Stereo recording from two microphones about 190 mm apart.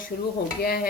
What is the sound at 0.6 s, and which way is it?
Speech, 50° left (ahead or behind).